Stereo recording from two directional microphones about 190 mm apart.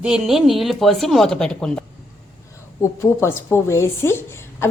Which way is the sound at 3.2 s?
10° left (ahead or behind).